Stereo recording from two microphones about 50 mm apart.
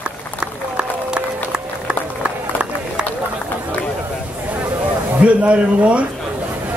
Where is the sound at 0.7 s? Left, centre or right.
Right.